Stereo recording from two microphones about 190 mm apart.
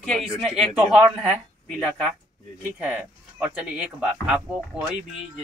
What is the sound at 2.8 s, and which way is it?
Speech, 5° right (ahead or behind).